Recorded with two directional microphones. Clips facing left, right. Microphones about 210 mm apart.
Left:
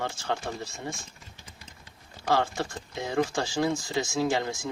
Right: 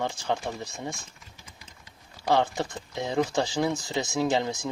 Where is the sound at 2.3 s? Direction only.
20° right (ahead or behind).